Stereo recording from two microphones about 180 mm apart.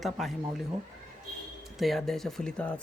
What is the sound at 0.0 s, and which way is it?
Speech, centre (ahead or behind).